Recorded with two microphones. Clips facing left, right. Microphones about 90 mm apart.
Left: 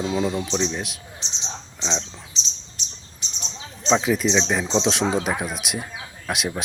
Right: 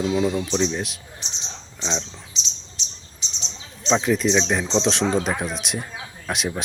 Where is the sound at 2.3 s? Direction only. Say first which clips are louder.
Even; 35° left (ahead or behind).